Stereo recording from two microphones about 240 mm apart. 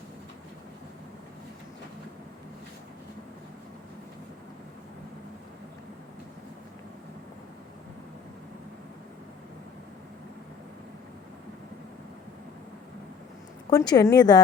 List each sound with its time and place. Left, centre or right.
13.7 s a woman's voice: centre